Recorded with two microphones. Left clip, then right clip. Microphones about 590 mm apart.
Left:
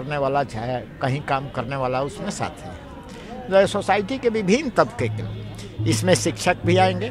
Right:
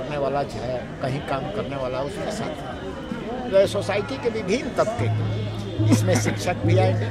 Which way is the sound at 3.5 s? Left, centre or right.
Left.